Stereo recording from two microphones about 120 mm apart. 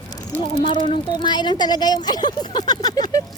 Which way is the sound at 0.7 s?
40° left (ahead or behind).